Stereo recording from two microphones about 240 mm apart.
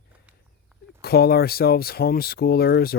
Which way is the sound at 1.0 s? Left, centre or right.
Left.